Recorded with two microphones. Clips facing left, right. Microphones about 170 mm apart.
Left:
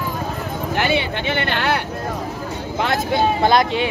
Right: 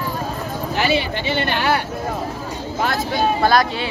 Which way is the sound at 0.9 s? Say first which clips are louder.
Even; 20° left (ahead or behind).